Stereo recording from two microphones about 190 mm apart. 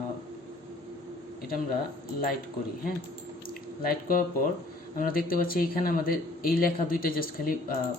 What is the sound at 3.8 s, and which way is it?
Speech, 50° left (ahead or behind).